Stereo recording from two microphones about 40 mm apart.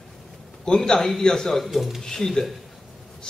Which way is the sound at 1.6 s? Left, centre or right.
Centre.